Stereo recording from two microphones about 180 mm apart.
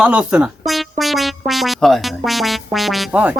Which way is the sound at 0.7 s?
Centre (ahead or behind).